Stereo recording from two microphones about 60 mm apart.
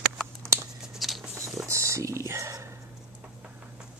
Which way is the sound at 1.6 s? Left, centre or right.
Right.